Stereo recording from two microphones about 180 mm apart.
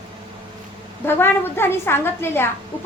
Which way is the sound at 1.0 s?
10° left (ahead or behind).